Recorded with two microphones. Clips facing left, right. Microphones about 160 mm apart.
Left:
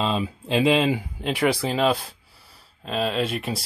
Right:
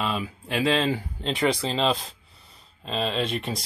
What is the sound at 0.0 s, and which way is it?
Speech, 25° left (ahead or behind).